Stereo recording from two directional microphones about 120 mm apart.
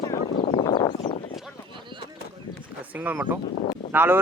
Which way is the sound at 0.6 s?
40° left (ahead or behind).